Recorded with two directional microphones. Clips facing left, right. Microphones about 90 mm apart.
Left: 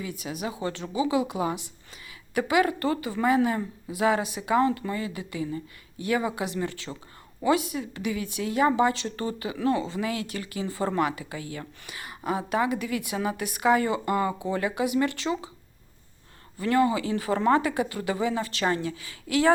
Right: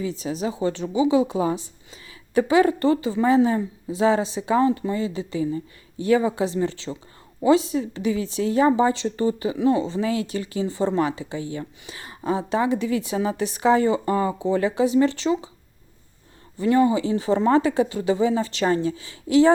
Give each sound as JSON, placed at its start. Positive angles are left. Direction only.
{"t": 0.0, "sound": "speech", "side_deg": -30}
{"t": 16.6, "sound": "speech", "side_deg": -25}